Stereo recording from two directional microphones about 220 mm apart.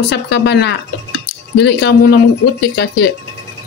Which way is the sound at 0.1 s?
50° left (ahead or behind).